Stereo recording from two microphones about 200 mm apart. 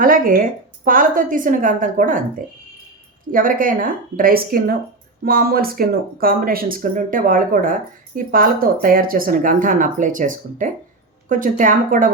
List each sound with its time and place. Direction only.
0.0 s a woman's voice: 45° right (ahead or behind)